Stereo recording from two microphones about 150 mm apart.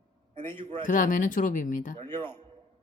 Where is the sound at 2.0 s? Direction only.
15° left (ahead or behind).